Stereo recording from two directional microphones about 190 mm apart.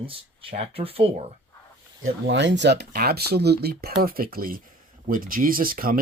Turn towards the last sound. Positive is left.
turn(degrees=-45)  # may be behind; listen again after turning